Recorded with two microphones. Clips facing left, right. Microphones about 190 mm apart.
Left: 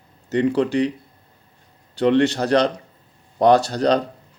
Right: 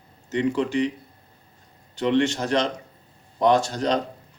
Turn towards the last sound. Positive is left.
turn(degrees=35)  # may be behind; listen again after turning